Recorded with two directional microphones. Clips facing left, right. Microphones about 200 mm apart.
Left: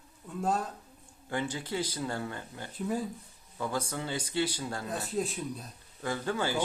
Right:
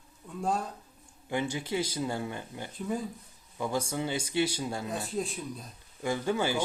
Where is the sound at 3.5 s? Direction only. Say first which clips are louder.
Right 2 dB; 15° right (ahead or behind).